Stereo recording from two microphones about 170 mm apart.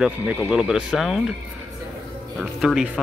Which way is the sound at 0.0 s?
5° right (ahead or behind).